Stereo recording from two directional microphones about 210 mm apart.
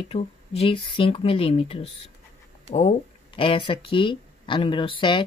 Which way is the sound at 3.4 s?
25° left (ahead or behind).